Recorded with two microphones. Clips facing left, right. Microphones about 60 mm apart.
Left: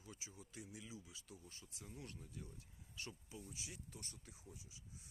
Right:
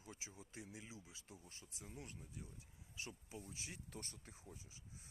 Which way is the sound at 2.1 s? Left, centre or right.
Centre.